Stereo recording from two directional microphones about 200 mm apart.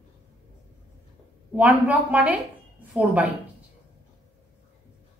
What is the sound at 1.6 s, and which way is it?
A woman's voice, 5° right (ahead or behind).